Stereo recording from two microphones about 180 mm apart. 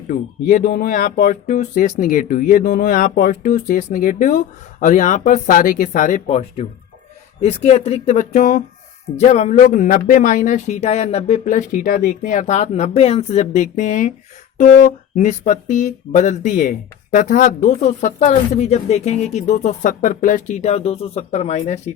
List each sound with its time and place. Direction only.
0.1 s speech: 45° left (ahead or behind)